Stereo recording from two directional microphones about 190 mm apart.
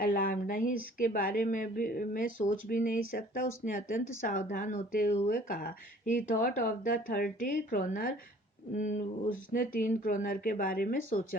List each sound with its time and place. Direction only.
0.0 s speech: 50° left (ahead or behind)